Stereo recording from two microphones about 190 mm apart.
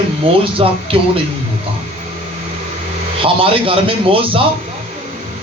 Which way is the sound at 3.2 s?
30° right (ahead or behind).